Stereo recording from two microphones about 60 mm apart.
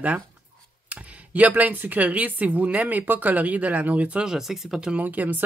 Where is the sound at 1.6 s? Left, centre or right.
Right.